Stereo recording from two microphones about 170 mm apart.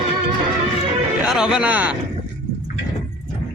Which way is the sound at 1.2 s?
5° right (ahead or behind).